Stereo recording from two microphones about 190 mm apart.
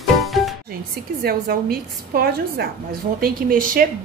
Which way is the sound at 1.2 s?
50° right (ahead or behind).